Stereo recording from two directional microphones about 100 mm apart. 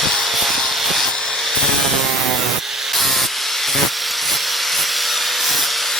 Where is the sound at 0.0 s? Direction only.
Centre (ahead or behind).